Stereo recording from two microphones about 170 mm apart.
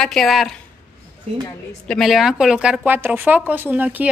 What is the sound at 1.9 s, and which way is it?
Speech, centre (ahead or behind).